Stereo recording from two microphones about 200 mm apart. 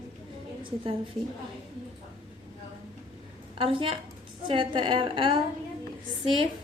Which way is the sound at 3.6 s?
25° right (ahead or behind).